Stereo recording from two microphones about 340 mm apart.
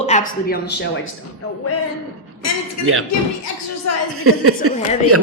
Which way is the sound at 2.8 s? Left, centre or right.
Right.